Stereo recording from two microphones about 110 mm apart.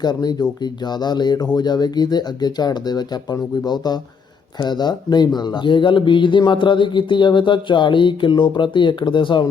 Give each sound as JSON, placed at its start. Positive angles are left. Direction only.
{"t": 0.0, "sound": "speech", "side_deg": 40}